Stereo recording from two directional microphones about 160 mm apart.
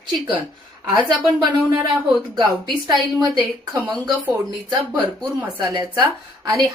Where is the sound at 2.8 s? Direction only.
25° right (ahead or behind).